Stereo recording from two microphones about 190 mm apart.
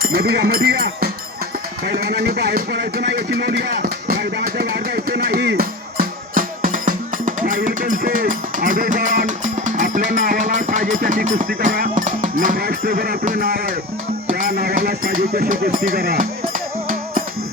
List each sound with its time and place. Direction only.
0.0 s speech: 55° right (ahead or behind)
1.9 s a sound: 55° right (ahead or behind)
14.3 s music: 45° right (ahead or behind)